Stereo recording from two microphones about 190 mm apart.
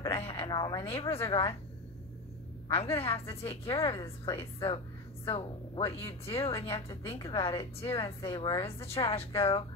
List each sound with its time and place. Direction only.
0.1 s a sound: 30° left (ahead or behind)
1.1 s a woman's voice: 30° left (ahead or behind)
2.7 s a woman's voice: 30° left (ahead or behind)